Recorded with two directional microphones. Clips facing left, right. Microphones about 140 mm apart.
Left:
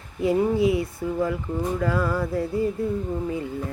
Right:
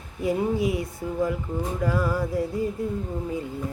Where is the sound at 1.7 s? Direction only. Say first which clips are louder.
Even; 15° right (ahead or behind).